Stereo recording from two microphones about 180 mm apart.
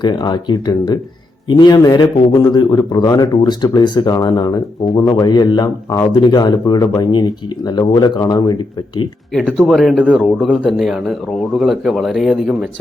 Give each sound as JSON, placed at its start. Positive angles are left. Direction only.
{"t": 0.0, "sound": "a man's voice", "side_deg": 25}
{"t": 9.3, "sound": "speech", "side_deg": 0}